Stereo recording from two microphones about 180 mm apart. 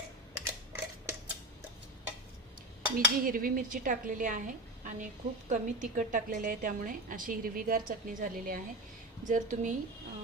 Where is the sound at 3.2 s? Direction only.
50° right (ahead or behind).